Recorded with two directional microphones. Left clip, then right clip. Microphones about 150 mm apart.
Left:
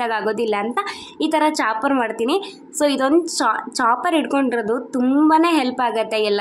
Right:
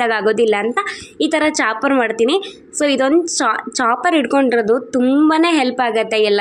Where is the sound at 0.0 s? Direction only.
20° right (ahead or behind).